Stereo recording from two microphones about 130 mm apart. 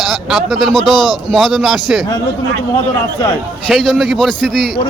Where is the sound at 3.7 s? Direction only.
Centre (ahead or behind).